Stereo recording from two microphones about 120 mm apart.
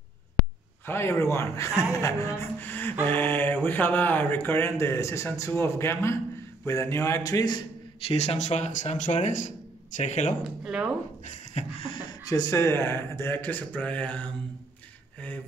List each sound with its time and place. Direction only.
0.8 s a sound: 20° left (ahead or behind)
8.0 s speech: 55° left (ahead or behind); by 10.3 s 80° left
10.4 s speech: 5° right (ahead or behind)
11.2 s beatboxing: 55° left (ahead or behind)
12.3 s speech: 30° left (ahead or behind); by 14.3 s 10° left (ahead or behind)